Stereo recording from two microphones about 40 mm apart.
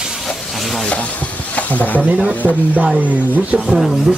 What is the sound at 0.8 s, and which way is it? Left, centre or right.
Speech, left.